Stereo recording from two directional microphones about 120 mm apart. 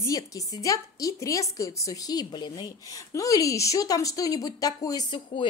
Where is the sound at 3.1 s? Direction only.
30° left (ahead or behind).